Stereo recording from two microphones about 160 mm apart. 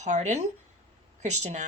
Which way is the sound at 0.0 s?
45° right (ahead or behind).